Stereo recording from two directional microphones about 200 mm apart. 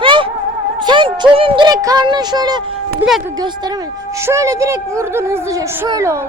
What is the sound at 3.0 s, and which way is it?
Speech, centre (ahead or behind).